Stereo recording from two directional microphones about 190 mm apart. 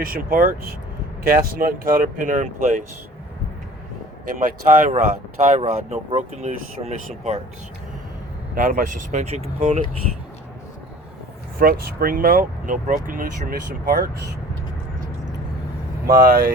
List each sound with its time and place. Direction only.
0.0 s speech: 50° right (ahead or behind)
4.4 s speech: 45° right (ahead or behind)
8.5 s speech: 45° right (ahead or behind)
11.6 s speech: 50° right (ahead or behind)
16.0 s speech: 50° right (ahead or behind)